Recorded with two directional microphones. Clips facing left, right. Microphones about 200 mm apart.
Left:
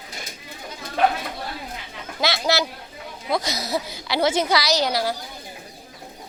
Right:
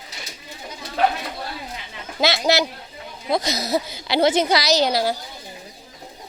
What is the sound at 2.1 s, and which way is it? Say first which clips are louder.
A woman's voice: right 3 dB; 25° right (ahead or behind).